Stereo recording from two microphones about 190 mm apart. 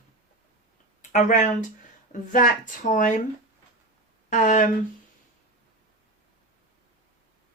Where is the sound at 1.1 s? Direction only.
40° left (ahead or behind).